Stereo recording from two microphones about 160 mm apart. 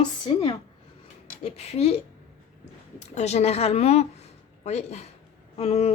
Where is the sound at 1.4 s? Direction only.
40° left (ahead or behind).